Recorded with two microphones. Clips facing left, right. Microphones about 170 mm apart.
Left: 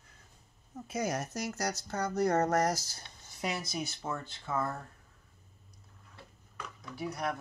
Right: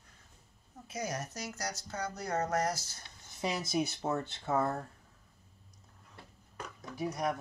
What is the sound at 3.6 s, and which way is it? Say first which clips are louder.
Speech: right 5 dB; 50° right (ahead or behind).